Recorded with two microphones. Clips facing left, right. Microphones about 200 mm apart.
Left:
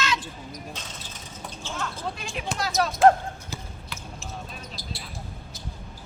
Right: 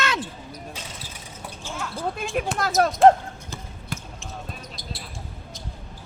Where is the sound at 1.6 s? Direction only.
10° right (ahead or behind).